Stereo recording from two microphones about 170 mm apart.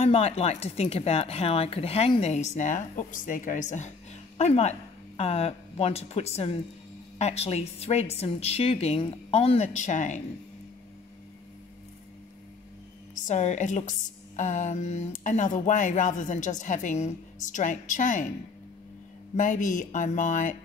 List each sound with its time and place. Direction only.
0.0 s speech: 40° left (ahead or behind)
13.3 s a woman's voice: 45° left (ahead or behind)
19.3 s a woman's voice: 45° left (ahead or behind)